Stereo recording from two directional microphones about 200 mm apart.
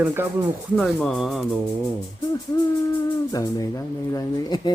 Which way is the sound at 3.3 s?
20° left (ahead or behind).